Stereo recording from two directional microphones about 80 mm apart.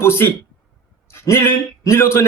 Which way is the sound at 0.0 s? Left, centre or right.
Left.